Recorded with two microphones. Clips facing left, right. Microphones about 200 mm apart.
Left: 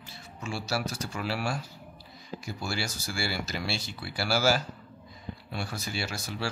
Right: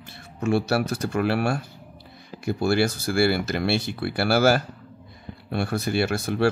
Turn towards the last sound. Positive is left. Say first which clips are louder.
# right 12 dB
turn(degrees=-55)  # may be behind; listen again after turning